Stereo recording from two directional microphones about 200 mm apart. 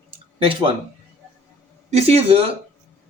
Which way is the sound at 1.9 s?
30° right (ahead or behind).